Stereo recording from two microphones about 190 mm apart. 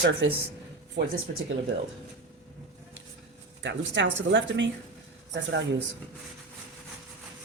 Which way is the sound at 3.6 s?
70° right (ahead or behind).